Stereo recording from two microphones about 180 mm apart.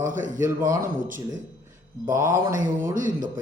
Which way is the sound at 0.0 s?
45° right (ahead or behind).